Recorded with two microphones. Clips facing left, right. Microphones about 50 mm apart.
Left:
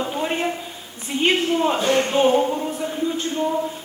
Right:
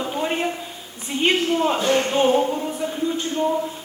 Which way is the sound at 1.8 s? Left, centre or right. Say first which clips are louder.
Left 1 dB; left.